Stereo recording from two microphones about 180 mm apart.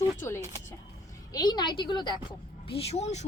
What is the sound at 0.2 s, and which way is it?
A woman's voice, 15° left (ahead or behind).